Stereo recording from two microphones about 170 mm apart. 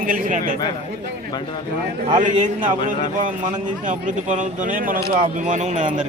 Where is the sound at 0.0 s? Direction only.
55° right (ahead or behind).